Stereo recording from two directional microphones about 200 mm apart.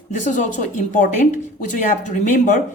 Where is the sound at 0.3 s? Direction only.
40° left (ahead or behind).